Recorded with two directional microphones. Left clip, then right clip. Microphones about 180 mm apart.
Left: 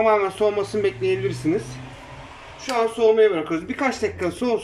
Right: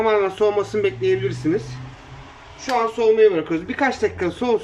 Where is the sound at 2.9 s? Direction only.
20° right (ahead or behind).